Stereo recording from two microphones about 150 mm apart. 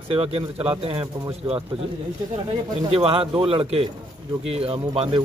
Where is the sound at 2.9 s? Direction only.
40° right (ahead or behind).